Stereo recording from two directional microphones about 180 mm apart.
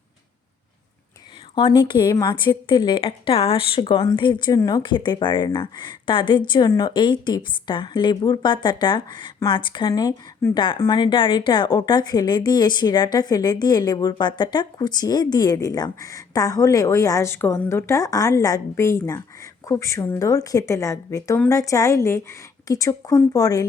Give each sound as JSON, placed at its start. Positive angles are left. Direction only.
{"t": 1.5, "sound": "a woman's voice", "side_deg": 25}